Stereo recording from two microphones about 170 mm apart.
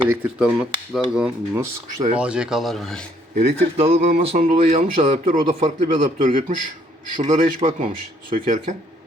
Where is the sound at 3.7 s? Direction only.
35° right (ahead or behind).